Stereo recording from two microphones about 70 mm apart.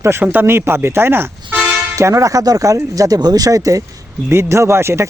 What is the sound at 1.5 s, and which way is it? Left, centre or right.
Toot, centre.